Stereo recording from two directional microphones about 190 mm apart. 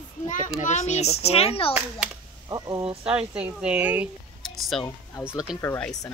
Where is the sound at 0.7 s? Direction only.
40° left (ahead or behind).